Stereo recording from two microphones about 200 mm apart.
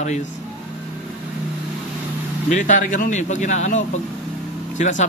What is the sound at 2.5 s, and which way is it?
A man's voice, 40° left (ahead or behind).